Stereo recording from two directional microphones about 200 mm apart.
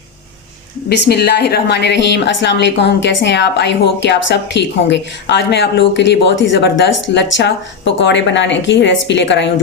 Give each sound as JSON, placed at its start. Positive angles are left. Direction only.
{"t": 0.9, "sound": "a woman's voice", "side_deg": 55}